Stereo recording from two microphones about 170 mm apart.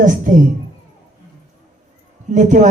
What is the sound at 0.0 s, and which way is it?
Speech, 50° right (ahead or behind).